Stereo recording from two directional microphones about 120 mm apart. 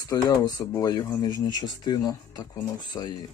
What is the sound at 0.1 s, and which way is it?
Speech, 35° left (ahead or behind).